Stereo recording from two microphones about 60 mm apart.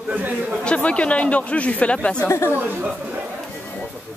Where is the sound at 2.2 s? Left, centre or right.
Left.